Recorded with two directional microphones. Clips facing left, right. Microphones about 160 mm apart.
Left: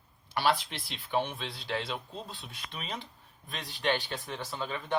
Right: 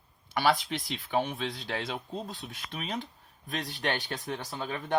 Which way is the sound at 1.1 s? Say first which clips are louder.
Right 2 dB; 45° right (ahead or behind).